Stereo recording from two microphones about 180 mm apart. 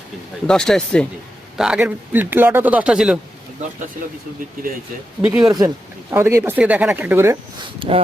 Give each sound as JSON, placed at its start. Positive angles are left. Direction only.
{"t": 0.4, "sound": "speech", "side_deg": 5}
{"t": 5.2, "sound": "speech", "side_deg": -5}
{"t": 5.5, "sound": "speech", "side_deg": -20}
{"t": 7.8, "sound": "speech", "side_deg": -30}